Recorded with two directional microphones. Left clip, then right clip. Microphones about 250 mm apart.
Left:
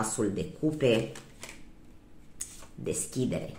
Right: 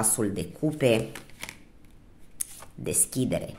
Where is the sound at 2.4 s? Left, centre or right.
Right.